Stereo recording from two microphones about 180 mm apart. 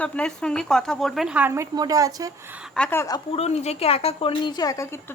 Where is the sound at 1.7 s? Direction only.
20° right (ahead or behind).